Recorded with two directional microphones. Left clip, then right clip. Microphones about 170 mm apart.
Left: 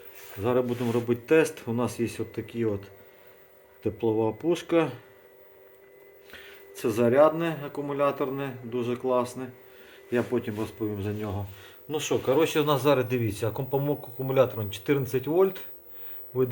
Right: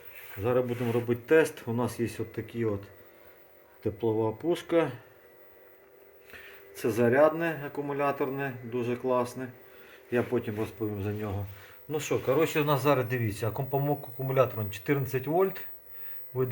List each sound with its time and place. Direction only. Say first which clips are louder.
0.4 s speech: left 2 dB; 5° left (ahead or behind)
6.3 s speech: left 1 dB; centre (ahead or behind)